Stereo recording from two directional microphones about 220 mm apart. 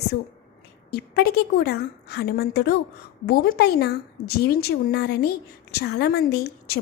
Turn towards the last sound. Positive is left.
turn(degrees=45)  # may be behind; listen again after turning